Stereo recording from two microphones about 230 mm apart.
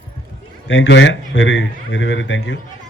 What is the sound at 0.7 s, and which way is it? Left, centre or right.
A man's voice, left.